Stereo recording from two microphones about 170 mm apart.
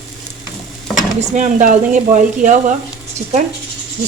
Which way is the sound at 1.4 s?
45° right (ahead or behind).